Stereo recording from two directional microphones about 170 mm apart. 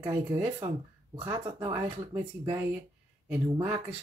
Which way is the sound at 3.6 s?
35° right (ahead or behind).